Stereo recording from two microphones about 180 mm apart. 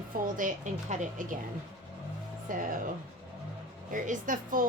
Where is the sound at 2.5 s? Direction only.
50° right (ahead or behind).